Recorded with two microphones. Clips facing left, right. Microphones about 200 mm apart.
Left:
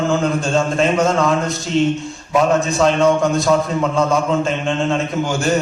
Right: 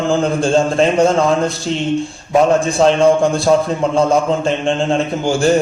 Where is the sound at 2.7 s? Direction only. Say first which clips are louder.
Right 3 dB; 30° right (ahead or behind).